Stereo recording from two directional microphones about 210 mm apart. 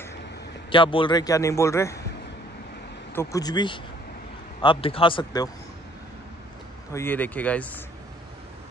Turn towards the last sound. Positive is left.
turn(degrees=5)  # may be behind; listen again after turning